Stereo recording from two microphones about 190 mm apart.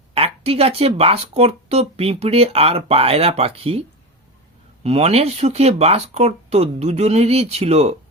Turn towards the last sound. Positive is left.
turn(degrees=-35)  # may be behind; listen again after turning